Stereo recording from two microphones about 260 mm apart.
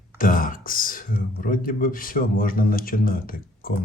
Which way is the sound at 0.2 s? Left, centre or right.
Left.